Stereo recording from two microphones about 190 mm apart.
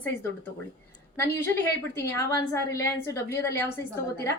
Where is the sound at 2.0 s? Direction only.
15° left (ahead or behind).